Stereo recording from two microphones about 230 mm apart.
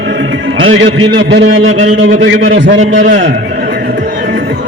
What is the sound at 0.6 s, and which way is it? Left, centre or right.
A man's voice, right.